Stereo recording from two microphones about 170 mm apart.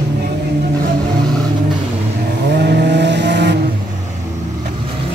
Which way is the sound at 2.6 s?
85° right.